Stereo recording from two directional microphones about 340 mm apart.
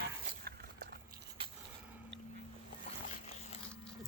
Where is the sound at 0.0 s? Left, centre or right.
Right.